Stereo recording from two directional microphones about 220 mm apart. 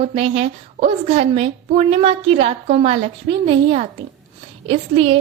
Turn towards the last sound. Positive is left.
turn(degrees=-25)  # may be behind; listen again after turning